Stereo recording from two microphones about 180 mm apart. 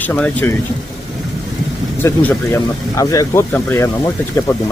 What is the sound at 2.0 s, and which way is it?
Speech, 15° left (ahead or behind).